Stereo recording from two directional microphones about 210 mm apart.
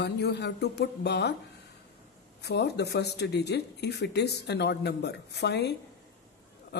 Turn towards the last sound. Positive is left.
turn(degrees=55)  # may be behind; listen again after turning